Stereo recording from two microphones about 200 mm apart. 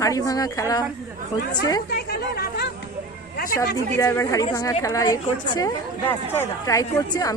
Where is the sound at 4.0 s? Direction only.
15° left (ahead or behind).